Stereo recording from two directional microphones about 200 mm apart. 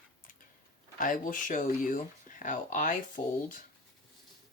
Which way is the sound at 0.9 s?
40° left (ahead or behind).